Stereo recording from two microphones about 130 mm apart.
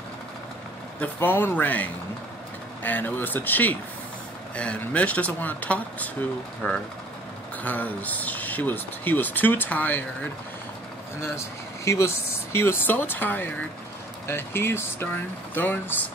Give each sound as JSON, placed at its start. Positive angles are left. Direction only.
{"t": 1.0, "sound": "speech", "side_deg": 15}
{"t": 11.1, "sound": "speech", "side_deg": 20}